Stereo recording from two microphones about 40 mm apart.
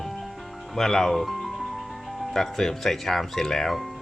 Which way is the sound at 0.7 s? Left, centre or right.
Centre.